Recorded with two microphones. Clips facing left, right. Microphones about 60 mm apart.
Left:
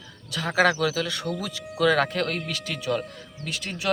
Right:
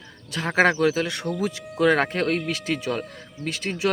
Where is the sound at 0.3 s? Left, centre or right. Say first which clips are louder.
Right 2 dB; right.